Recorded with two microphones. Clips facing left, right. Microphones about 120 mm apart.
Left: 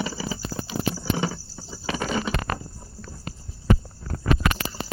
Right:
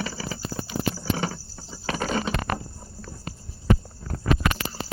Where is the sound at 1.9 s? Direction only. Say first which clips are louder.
Even; centre (ahead or behind).